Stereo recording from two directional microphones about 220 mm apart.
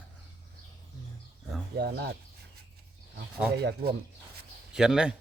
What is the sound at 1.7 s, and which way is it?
Speech, 45° right (ahead or behind).